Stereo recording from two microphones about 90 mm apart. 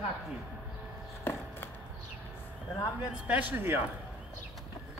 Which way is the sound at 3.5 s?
20° right (ahead or behind).